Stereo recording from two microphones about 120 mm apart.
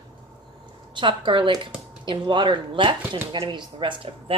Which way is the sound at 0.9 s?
45° right (ahead or behind).